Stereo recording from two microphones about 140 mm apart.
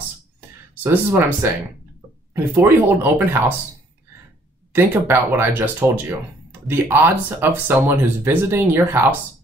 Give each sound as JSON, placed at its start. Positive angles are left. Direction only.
{"t": 0.8, "sound": "speech", "side_deg": -15}
{"t": 4.7, "sound": "speech", "side_deg": -15}